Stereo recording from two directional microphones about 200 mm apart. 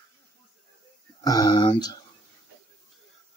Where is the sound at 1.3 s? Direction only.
20° left (ahead or behind).